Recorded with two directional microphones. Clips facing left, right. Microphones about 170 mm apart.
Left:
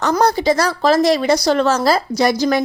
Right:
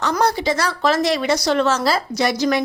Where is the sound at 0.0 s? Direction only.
40° left (ahead or behind).